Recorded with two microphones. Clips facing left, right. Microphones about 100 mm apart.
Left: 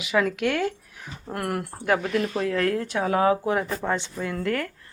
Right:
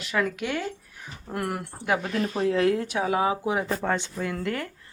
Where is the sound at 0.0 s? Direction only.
Centre (ahead or behind).